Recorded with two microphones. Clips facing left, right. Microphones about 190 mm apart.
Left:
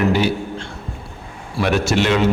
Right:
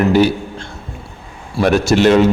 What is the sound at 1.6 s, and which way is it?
Speech, 40° right (ahead or behind).